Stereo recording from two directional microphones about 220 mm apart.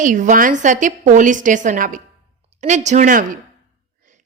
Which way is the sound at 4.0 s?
35° right (ahead or behind).